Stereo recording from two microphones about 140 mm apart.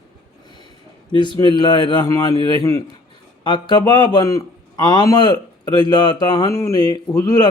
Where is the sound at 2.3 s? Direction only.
40° right (ahead or behind).